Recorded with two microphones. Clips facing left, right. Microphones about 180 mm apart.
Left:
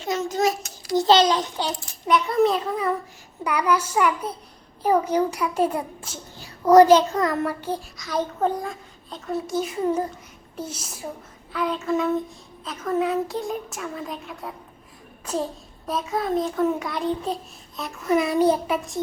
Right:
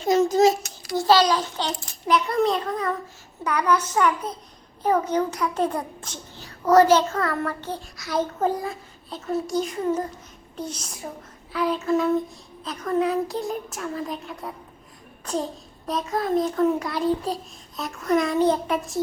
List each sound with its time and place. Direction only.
0.0 s a child's voice: 35° right (ahead or behind)
0.9 s a child's voice: 20° left (ahead or behind)
2.0 s a child's voice: centre (ahead or behind)
7.9 s a child's voice: 5° right (ahead or behind)
15.9 s a child's voice: centre (ahead or behind)